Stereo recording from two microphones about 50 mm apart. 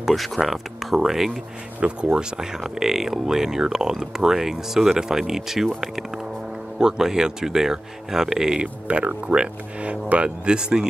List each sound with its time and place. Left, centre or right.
0.0 s speech: centre
1.8 s speech: right; by 5.7 s centre
6.8 s speech: centre
8.8 s speech: right